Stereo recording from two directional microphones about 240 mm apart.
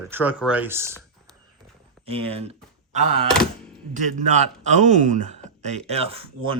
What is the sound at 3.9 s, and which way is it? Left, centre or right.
A man's voice, right.